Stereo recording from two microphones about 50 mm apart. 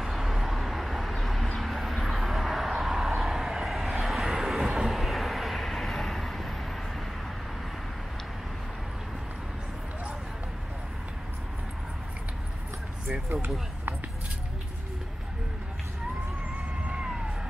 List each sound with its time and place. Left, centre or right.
0.0 s vehicle: centre
3.1 s a sound: centre
4.0 s vehicle: centre
13.3 s speech: right
16.8 s music: centre